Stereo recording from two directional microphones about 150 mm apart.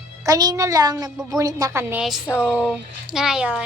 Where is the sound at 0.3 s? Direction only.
25° right (ahead or behind).